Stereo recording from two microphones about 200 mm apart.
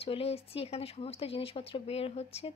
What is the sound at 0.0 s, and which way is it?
Speech, 30° left (ahead or behind).